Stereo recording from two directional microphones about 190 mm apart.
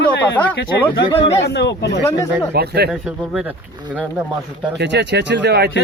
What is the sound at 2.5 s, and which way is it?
Speech, 55° right (ahead or behind).